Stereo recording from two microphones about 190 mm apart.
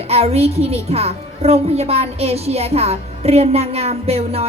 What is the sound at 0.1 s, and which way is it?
A child's voice, 30° right (ahead or behind).